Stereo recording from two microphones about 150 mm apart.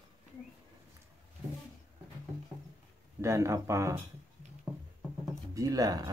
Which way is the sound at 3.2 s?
20° right (ahead or behind).